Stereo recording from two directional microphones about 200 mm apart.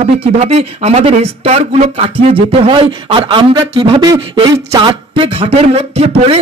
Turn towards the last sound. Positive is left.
turn(degrees=-30)  # may be behind; listen again after turning